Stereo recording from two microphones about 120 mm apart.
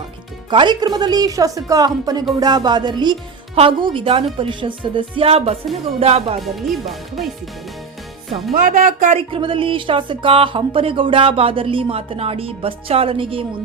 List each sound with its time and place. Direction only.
0.5 s a woman's voice: 40° right (ahead or behind); by 6.4 s 55° right (ahead or behind)
6.4 s speech: centre (ahead or behind)
8.7 s speech: 90° right
9.3 s speech: 45° right (ahead or behind)